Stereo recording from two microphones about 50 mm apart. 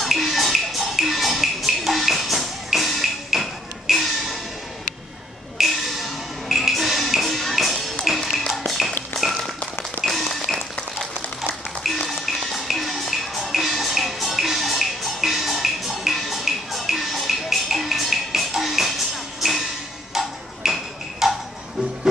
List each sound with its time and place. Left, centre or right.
0.0 s music: centre
5.6 s music: centre
8.3 s tap: centre
10.0 s a sound: centre
11.8 s music: centre
20.2 s tick-tock: centre